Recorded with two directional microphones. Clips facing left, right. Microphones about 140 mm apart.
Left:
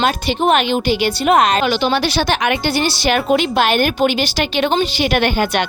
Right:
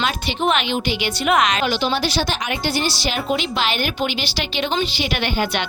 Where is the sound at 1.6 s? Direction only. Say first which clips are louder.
Left 4 dB; 65° left (ahead or behind).